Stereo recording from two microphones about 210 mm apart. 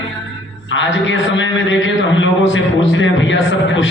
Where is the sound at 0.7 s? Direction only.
65° left (ahead or behind).